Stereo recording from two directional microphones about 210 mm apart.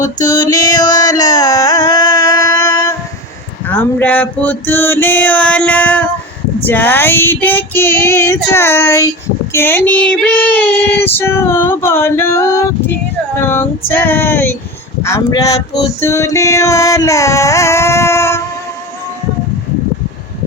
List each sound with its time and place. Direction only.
0.2 s music: 20° left (ahead or behind)
3.7 s male singing: 10° left (ahead or behind)
6.7 s a sound: 10° left (ahead or behind)